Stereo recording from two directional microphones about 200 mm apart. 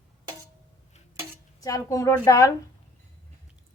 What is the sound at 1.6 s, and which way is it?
Speech, 15° left (ahead or behind).